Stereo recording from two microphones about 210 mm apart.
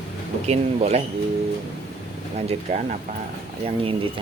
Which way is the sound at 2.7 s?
35° right (ahead or behind).